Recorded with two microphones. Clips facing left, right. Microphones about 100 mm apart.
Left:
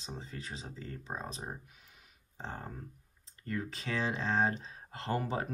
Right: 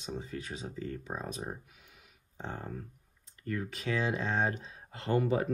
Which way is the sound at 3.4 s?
30° left (ahead or behind).